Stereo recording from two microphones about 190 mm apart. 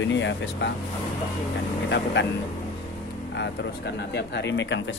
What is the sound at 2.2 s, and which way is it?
Speech, 65° left (ahead or behind).